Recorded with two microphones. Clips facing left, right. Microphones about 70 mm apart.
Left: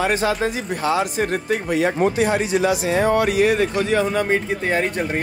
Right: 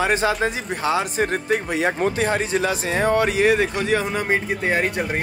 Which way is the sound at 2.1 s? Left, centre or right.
Right.